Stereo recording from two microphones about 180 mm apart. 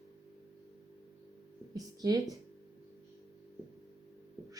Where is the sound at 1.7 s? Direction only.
20° right (ahead or behind).